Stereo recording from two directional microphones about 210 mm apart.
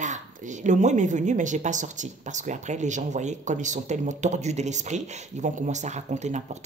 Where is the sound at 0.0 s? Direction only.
35° right (ahead or behind).